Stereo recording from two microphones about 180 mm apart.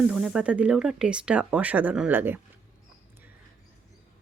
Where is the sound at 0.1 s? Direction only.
5° right (ahead or behind).